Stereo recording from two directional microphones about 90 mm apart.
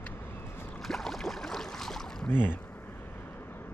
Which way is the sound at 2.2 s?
20° left (ahead or behind).